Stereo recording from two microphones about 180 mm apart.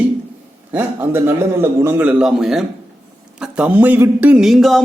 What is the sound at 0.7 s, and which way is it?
A man's voice, 10° right (ahead or behind).